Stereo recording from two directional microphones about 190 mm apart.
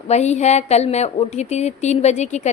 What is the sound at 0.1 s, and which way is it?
A woman's voice, 35° left (ahead or behind).